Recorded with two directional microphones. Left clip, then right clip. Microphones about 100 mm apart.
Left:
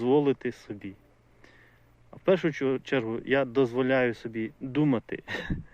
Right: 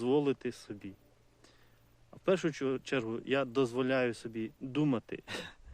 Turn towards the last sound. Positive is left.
turn(degrees=-15)  # may be behind; listen again after turning